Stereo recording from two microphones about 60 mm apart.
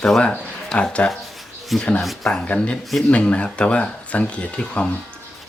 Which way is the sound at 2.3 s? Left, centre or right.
Centre.